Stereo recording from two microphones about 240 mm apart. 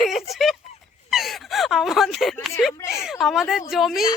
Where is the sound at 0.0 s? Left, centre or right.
Centre.